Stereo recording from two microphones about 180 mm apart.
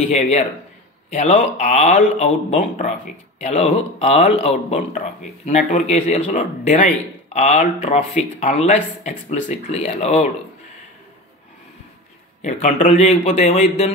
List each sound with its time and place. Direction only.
0.1 s speech: 40° left (ahead or behind)
12.4 s speech: 40° left (ahead or behind)